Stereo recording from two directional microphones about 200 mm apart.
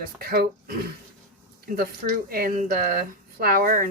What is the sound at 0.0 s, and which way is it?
Speech, 50° right (ahead or behind).